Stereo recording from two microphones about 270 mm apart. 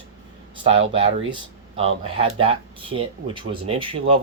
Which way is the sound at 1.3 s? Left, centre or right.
Right.